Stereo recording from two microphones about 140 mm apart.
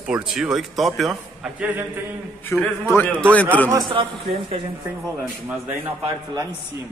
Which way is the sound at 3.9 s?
40° right (ahead or behind).